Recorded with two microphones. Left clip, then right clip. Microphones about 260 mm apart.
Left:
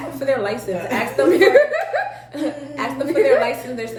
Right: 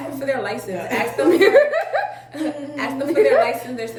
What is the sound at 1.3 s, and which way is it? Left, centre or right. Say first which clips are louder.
Speech: even; centre.